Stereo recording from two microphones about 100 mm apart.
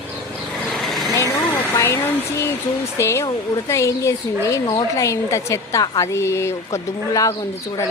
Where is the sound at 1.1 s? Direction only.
30° left (ahead or behind).